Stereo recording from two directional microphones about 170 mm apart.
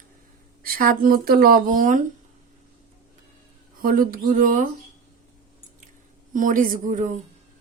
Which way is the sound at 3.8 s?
55° right (ahead or behind).